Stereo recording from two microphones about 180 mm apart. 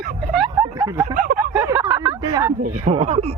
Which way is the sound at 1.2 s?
50° right (ahead or behind).